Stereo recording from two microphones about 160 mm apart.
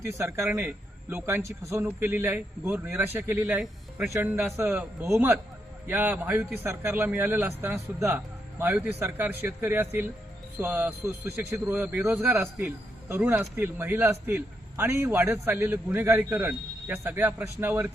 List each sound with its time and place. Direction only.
0.0 s a man's voice: 15° right (ahead or behind)